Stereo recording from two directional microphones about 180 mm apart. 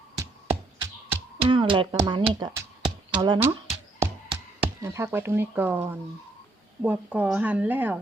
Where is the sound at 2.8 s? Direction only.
25° right (ahead or behind).